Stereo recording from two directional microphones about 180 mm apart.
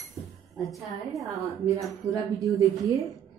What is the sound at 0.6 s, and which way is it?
Speech, centre (ahead or behind).